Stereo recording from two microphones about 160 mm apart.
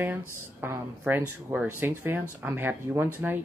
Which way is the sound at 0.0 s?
10° right (ahead or behind).